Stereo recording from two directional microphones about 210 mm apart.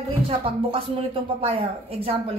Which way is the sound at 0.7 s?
25° right (ahead or behind).